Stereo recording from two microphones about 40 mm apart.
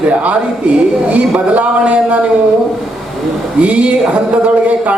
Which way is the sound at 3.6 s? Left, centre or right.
Right.